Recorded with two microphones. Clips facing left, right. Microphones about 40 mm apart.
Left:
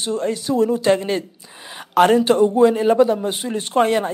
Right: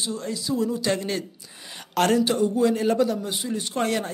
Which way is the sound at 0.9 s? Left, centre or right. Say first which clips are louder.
Left 8 dB; left.